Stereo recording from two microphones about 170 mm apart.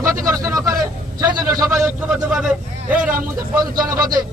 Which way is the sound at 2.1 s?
5° right (ahead or behind).